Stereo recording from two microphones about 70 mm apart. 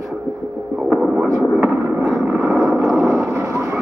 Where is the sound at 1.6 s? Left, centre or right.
Right.